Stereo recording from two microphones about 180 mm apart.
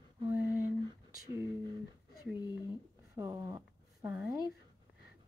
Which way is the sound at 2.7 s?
15° right (ahead or behind).